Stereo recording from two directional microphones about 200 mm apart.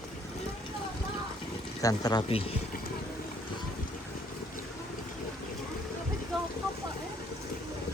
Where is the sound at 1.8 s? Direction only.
20° left (ahead or behind).